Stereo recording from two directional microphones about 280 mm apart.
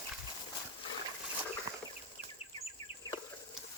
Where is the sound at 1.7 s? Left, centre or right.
Centre.